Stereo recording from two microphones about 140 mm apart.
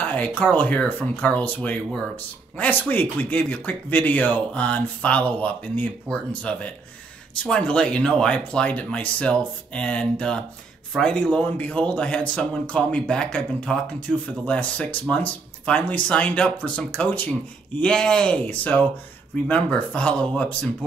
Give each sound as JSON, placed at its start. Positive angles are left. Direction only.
{"t": 0.0, "sound": "speech", "side_deg": 10}
{"t": 14.1, "sound": "speech", "side_deg": -5}
{"t": 14.4, "sound": "speech", "side_deg": 10}